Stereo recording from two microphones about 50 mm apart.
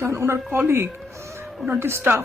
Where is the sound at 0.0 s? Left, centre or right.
Right.